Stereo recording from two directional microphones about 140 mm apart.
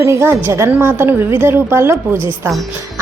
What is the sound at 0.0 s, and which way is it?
A woman's voice, 20° right (ahead or behind).